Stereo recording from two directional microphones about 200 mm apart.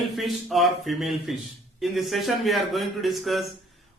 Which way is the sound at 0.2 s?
Centre (ahead or behind).